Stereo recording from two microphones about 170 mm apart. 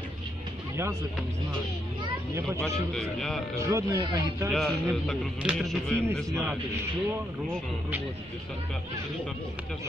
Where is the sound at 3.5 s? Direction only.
20° right (ahead or behind).